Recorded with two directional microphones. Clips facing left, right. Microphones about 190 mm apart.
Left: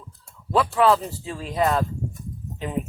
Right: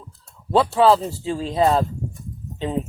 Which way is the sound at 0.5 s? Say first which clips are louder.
Right 3 dB; 30° right (ahead or behind).